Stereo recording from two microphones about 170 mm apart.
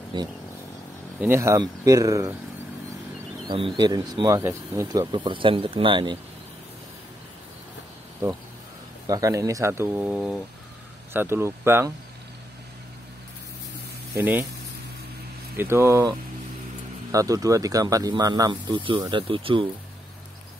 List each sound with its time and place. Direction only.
1.2 s speech: 15° right (ahead or behind)
3.4 s speech: 30° right (ahead or behind)
9.0 s speech: 20° right (ahead or behind)
14.1 s speech: 10° right (ahead or behind)
15.5 s speech: 15° right (ahead or behind); by 19.7 s 30° right (ahead or behind)